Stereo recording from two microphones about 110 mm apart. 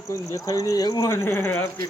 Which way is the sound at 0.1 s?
30° left (ahead or behind).